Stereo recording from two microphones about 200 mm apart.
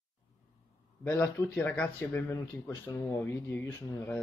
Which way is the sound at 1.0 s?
10° left (ahead or behind).